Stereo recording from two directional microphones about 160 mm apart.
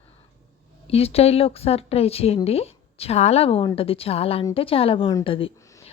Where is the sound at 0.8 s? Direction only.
40° left (ahead or behind).